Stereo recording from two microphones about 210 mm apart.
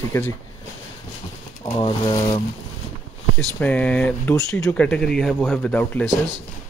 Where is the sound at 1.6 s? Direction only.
25° left (ahead or behind).